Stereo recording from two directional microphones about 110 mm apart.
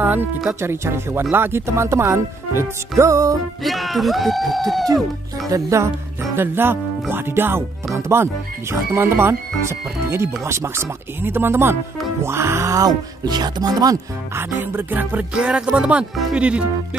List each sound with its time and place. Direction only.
0.0 s music: 20° right (ahead or behind)
0.6 s speech: 25° right (ahead or behind)
3.6 s speech: centre (ahead or behind)
5.5 s speech: 30° right (ahead or behind)
14.3 s music: 20° right (ahead or behind)